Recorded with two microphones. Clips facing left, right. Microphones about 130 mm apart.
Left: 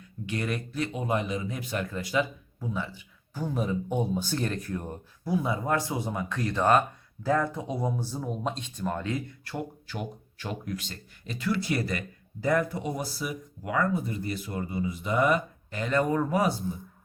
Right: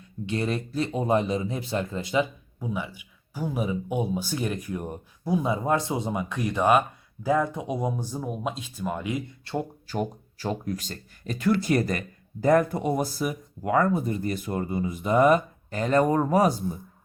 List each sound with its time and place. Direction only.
0.3 s speech: 30° right (ahead or behind); by 9.2 s 15° right (ahead or behind)
9.4 s speech: 25° right (ahead or behind)
9.8 s speech: 40° right (ahead or behind)